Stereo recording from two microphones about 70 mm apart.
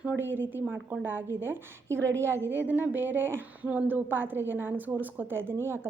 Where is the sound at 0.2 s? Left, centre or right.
Right.